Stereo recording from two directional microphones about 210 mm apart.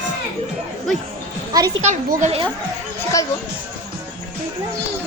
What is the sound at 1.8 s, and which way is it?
Speech, 30° right (ahead or behind).